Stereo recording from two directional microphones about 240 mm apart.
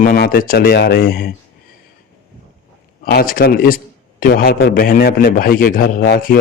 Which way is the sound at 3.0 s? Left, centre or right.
Left.